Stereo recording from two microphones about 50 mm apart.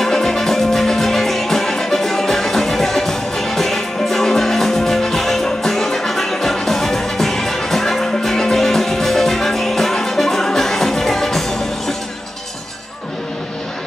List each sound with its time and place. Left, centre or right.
0.0 s music: centre